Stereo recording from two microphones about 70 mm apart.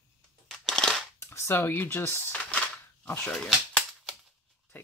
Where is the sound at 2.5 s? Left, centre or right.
Centre.